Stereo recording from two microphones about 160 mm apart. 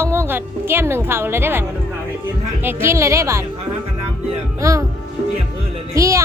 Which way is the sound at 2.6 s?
15° right (ahead or behind).